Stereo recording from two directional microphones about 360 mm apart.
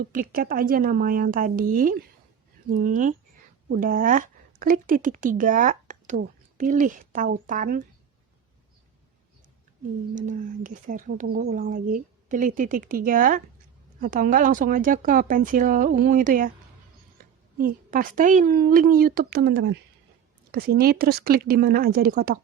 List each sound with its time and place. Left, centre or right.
0.0 s speech: right
10.2 s speech: right
17.6 s speech: right